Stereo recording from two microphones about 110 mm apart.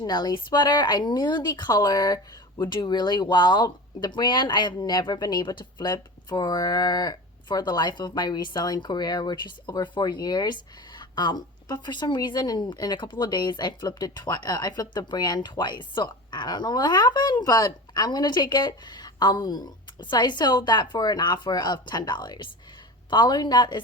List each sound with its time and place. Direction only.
0.0 s speech: 40° left (ahead or behind)